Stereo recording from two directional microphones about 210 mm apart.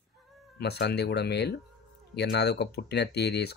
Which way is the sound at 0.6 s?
50° left (ahead or behind).